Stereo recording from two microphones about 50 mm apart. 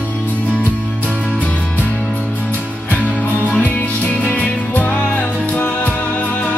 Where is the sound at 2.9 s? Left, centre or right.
Left.